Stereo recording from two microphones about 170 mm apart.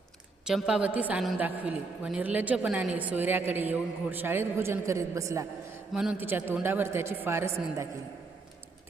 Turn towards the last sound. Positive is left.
turn(degrees=-15)  # may be behind; listen again after turning